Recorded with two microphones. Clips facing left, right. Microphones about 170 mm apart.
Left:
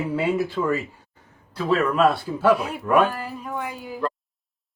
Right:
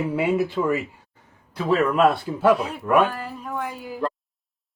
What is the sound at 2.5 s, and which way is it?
A man's voice, centre (ahead or behind).